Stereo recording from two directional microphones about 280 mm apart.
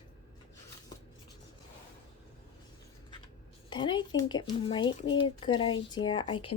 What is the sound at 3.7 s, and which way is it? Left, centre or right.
Speech, centre.